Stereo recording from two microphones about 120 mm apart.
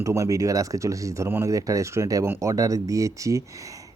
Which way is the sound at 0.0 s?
25° right (ahead or behind).